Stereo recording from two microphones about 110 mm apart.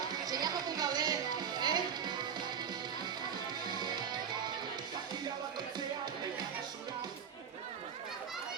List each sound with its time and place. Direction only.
0.0 s music: 35° right (ahead or behind)
3.7 s music: 40° right (ahead or behind)